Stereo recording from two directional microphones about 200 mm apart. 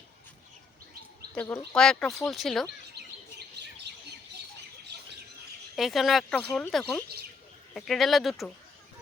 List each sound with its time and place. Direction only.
1.3 s speech: 5° left (ahead or behind)
3.0 s chirp: 55° right (ahead or behind)
5.7 s speech: centre (ahead or behind)